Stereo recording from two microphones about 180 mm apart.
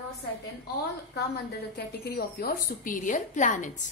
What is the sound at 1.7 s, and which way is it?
A woman's voice, 65° left (ahead or behind).